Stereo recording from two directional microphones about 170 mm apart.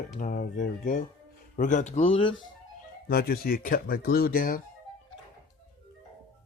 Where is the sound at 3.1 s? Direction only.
65° left (ahead or behind).